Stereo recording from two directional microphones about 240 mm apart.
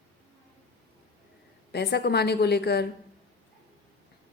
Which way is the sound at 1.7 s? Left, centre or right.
Left.